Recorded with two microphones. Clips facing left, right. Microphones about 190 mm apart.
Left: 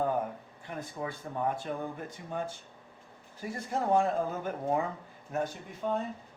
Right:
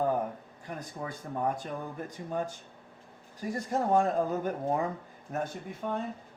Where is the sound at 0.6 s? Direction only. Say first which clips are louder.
Left 1 dB; 40° right (ahead or behind).